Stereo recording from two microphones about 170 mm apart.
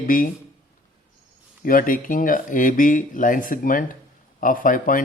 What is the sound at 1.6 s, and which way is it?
Speech, 55° left (ahead or behind).